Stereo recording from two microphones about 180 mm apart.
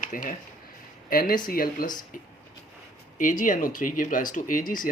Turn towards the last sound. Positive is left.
turn(degrees=50)  # may be behind; listen again after turning